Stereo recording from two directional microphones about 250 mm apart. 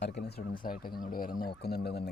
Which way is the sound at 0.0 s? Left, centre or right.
Left.